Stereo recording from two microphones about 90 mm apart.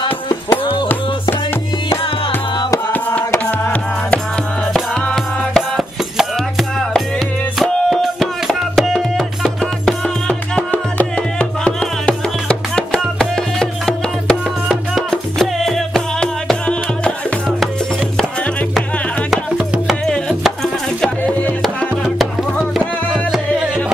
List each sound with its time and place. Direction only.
0.0 s music: 65° left (ahead or behind)
2.9 s music: 20° left (ahead or behind)
5.1 s music: centre (ahead or behind)
7.5 s music: 5° left (ahead or behind)
19.3 s music: 5° right (ahead or behind)
21.2 s music: 20° left (ahead or behind)
22.8 s music: 5° right (ahead or behind)